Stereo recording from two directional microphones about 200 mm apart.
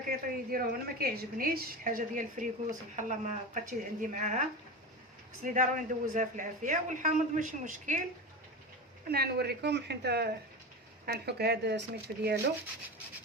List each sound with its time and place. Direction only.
0.1 s a woman's voice: 50° right (ahead or behind)
9.0 s a woman's voice: 50° right (ahead or behind)